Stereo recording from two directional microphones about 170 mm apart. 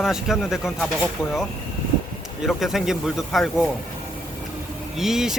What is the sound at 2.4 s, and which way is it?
Speech, centre (ahead or behind).